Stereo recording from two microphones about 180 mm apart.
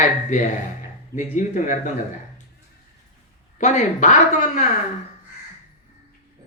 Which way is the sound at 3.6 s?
45° left (ahead or behind).